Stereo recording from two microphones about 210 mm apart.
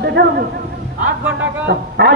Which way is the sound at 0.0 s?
50° right (ahead or behind).